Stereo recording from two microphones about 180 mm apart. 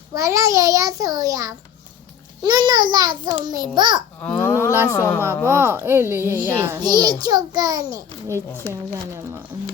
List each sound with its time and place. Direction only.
0.1 s a child's voice: 20° right (ahead or behind)
4.2 s speech: 10° left (ahead or behind)
5.5 s speech: 15° right (ahead or behind)
6.8 s a child's voice: 25° right (ahead or behind)